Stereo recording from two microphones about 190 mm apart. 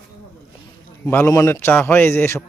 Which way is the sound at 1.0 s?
10° left (ahead or behind).